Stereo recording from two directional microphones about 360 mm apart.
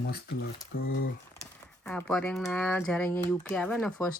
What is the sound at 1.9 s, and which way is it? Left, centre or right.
Speech, centre.